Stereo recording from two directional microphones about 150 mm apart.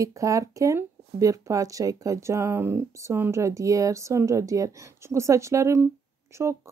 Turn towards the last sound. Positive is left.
turn(degrees=-20)  # may be behind; listen again after turning